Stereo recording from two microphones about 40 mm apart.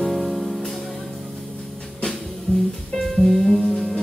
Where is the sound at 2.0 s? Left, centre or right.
Centre.